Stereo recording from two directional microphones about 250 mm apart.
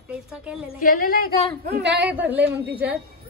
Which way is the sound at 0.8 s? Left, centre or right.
Left.